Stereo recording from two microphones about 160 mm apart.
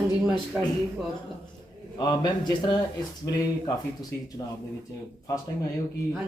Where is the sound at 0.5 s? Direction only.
10° right (ahead or behind).